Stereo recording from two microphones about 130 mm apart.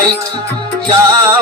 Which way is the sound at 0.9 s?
35° right (ahead or behind).